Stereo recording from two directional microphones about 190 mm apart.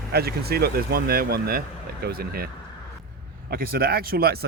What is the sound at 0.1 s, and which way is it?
Speech, 55° right (ahead or behind).